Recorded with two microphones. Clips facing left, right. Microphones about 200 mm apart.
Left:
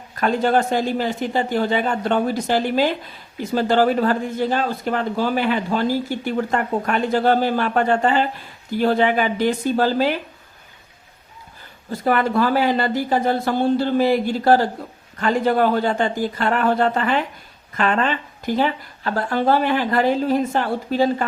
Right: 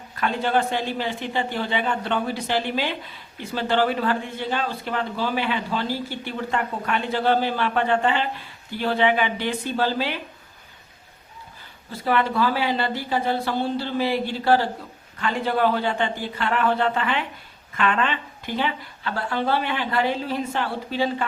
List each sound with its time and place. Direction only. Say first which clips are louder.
0.2 s a man's voice: left 5 dB; 40° left (ahead or behind)
11.9 s a man's voice: left 3 dB; 45° left (ahead or behind)